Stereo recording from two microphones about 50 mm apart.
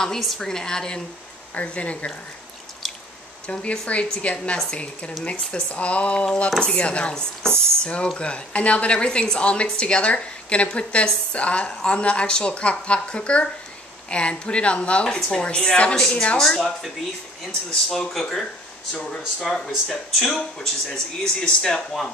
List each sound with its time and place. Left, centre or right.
0.0 s speech: centre
1.5 s a woman's voice: left
3.4 s a woman's voice: centre
16.3 s speech: centre